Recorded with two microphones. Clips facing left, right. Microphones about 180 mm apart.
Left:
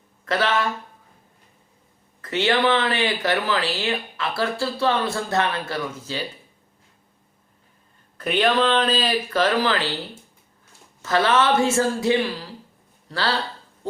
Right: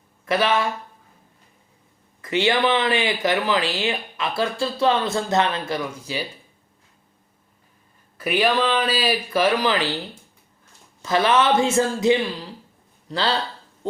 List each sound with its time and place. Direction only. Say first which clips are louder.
0.3 s speech: right 2 dB; 15° right (ahead or behind)
2.2 s speech: even; 15° right (ahead or behind)
8.2 s speech: even; 10° right (ahead or behind)
11.0 s speech: right 1 dB; 15° right (ahead or behind)